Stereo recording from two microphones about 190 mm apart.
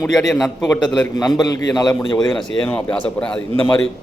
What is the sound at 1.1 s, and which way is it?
A man's voice, 20° left (ahead or behind).